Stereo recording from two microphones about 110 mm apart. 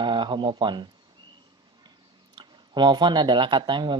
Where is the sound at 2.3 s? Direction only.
45° right (ahead or behind).